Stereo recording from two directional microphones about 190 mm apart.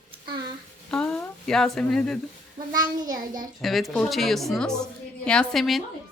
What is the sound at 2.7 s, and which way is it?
Speech, 20° right (ahead or behind).